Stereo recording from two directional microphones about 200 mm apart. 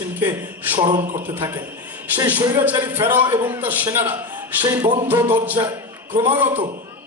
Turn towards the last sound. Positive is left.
turn(degrees=-10)  # may be behind; listen again after turning